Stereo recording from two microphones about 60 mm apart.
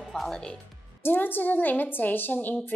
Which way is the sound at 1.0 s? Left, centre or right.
Left.